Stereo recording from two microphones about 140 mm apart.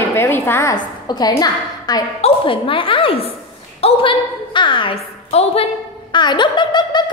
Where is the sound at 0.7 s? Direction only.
30° left (ahead or behind).